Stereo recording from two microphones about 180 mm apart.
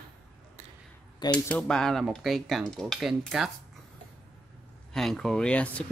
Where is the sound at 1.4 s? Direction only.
5° left (ahead or behind).